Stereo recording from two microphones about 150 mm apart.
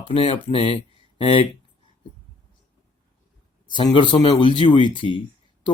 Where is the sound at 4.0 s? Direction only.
30° left (ahead or behind).